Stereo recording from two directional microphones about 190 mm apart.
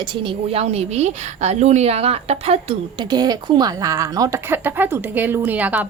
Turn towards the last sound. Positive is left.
turn(degrees=-10)  # may be behind; listen again after turning